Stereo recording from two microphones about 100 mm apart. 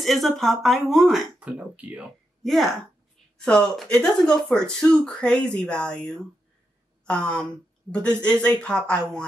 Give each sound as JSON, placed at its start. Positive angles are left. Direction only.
{"t": 0.0, "sound": "speech", "side_deg": 0}
{"t": 1.4, "sound": "speech", "side_deg": -15}
{"t": 2.4, "sound": "speech", "side_deg": 0}